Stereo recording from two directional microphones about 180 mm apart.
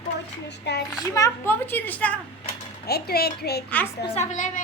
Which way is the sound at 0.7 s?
70° left (ahead or behind).